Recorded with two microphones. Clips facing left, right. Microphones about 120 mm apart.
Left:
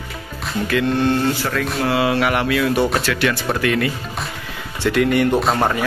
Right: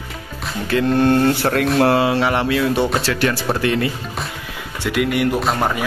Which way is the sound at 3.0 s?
35° right (ahead or behind).